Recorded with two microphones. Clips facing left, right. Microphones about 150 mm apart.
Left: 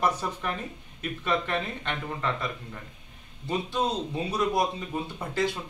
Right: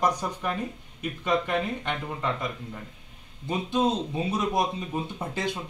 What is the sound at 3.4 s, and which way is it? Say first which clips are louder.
A man's voice: right 3 dB; 20° right (ahead or behind).